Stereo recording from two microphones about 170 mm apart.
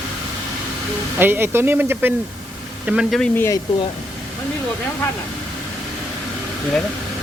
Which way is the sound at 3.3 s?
15° left (ahead or behind).